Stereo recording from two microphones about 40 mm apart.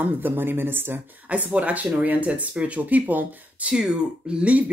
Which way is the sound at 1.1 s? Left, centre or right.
Right.